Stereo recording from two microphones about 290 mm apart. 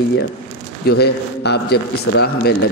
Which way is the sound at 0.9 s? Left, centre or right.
Left.